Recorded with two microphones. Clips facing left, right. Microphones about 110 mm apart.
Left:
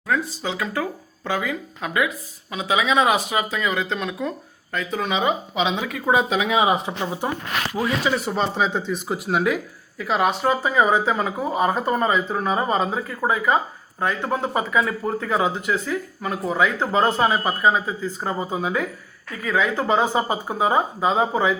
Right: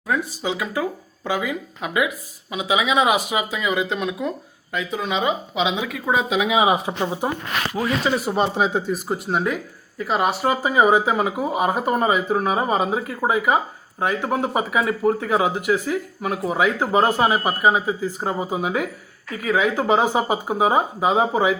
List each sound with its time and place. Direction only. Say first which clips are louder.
0.1 s speech: right 1 dB; 15° right (ahead or behind)
6.8 s speech: right 2 dB; 15° right (ahead or behind)